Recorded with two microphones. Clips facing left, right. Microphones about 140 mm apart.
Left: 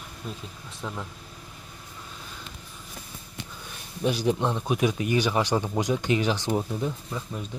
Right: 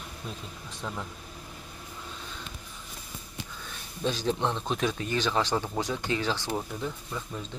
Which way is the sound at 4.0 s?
10° left (ahead or behind).